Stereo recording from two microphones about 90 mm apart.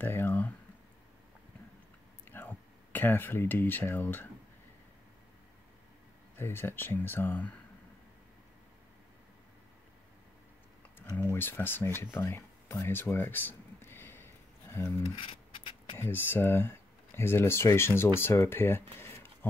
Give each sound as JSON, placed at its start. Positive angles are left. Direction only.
{"t": 0.0, "sound": "speech", "side_deg": 25}
{"t": 2.2, "sound": "speech", "side_deg": 25}
{"t": 6.3, "sound": "speech", "side_deg": 25}
{"t": 11.3, "sound": "speech", "side_deg": 25}
{"t": 15.1, "sound": "a sound", "side_deg": 70}
{"t": 16.0, "sound": "speech", "side_deg": 25}